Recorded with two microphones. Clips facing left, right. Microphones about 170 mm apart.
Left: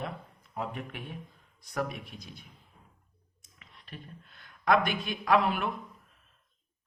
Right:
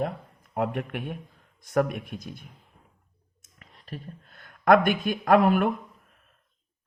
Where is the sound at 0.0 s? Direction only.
55° right (ahead or behind).